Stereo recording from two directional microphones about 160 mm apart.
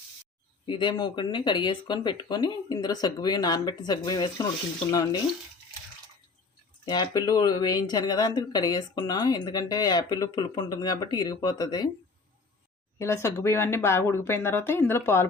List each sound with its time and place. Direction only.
0.6 s speech: 30° left (ahead or behind)
6.8 s speech: 30° left (ahead or behind)
13.0 s speech: 15° left (ahead or behind)